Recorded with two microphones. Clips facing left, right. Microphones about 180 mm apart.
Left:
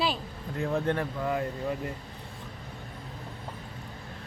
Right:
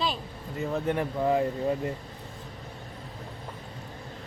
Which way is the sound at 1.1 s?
25° right (ahead or behind).